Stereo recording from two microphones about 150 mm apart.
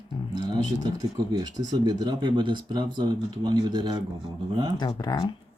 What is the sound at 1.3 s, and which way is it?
Speech, 25° right (ahead or behind).